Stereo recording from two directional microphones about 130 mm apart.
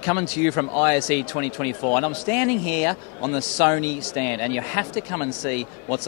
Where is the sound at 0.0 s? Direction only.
25° left (ahead or behind).